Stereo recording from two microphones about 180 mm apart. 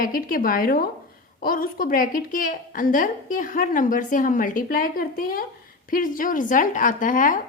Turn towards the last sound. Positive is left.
turn(degrees=50)  # may be behind; listen again after turning